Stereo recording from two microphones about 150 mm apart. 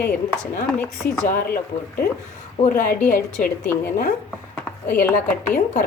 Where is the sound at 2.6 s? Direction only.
60° left (ahead or behind).